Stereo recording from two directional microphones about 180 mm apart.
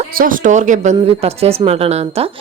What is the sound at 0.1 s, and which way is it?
Speech, 50° right (ahead or behind).